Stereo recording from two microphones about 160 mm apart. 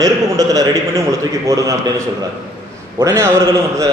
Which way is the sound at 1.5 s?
20° right (ahead or behind).